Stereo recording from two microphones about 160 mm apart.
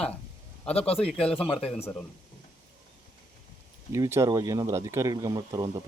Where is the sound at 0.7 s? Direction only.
40° left (ahead or behind).